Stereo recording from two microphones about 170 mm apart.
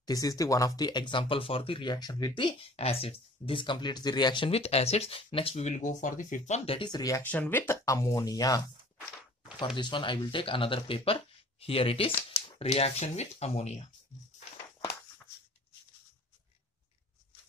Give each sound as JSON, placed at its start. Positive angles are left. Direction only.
{"t": 0.0, "sound": "speech", "side_deg": 20}
{"t": 9.8, "sound": "speech", "side_deg": 30}